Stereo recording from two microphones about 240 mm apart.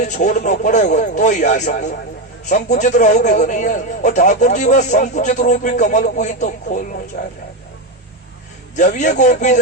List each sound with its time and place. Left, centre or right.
0.0 s a man's voice: left
8.7 s a man's voice: left